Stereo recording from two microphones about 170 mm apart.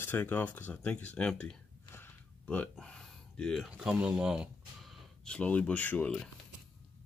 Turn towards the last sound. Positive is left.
turn(degrees=5)  # may be behind; listen again after turning